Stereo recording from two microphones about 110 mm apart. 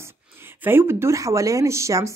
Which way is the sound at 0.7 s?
20° right (ahead or behind).